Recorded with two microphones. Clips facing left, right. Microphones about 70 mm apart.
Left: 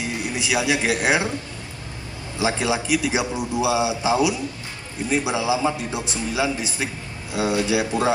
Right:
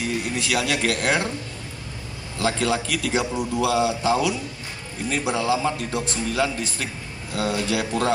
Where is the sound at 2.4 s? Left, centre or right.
Centre.